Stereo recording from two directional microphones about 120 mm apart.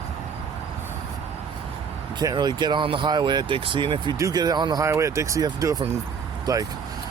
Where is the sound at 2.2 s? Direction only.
35° right (ahead or behind).